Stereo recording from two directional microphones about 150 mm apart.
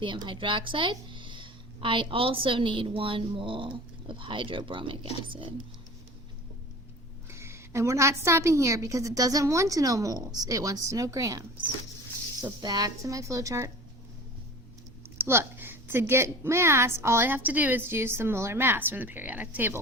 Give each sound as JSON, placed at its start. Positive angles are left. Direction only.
{"t": 0.0, "sound": "a woman's voice", "side_deg": -35}
{"t": 7.3, "sound": "a woman's voice", "side_deg": -15}
{"t": 15.2, "sound": "a woman's voice", "side_deg": -15}